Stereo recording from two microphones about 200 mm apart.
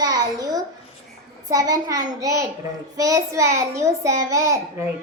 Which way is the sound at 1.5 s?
20° right (ahead or behind).